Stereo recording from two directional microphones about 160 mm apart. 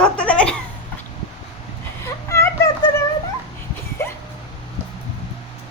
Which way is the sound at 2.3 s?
20° left (ahead or behind).